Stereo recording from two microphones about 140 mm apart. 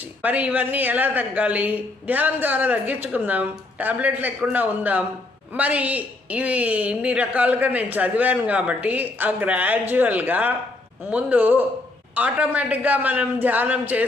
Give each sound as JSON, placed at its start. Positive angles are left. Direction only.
{"t": 0.2, "sound": "a woman's voice", "side_deg": -10}